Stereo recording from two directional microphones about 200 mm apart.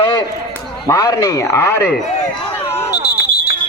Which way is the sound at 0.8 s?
15° left (ahead or behind).